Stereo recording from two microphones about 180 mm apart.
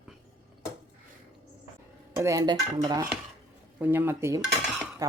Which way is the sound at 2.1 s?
20° right (ahead or behind).